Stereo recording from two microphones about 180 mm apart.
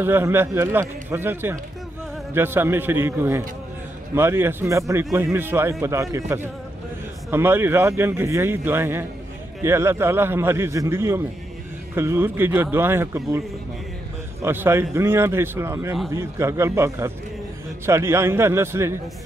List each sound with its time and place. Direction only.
0.0 s a man's voice: 10° right (ahead or behind)
14.4 s a man's voice: 10° right (ahead or behind)